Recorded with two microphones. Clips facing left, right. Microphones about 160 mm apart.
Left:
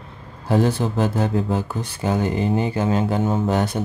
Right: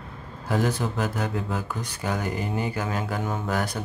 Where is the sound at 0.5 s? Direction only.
30° left (ahead or behind).